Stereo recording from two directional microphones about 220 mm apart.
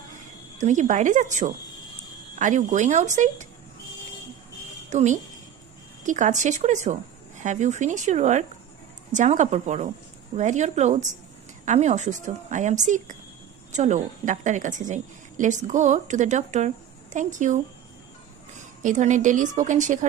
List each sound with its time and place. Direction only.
0.6 s a woman's voice: 35° right (ahead or behind)
4.9 s a woman's voice: 30° right (ahead or behind)
18.8 s a woman's voice: 35° right (ahead or behind)